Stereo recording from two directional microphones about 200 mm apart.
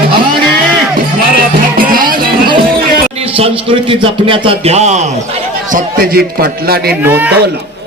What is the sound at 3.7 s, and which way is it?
A man's voice, 25° right (ahead or behind).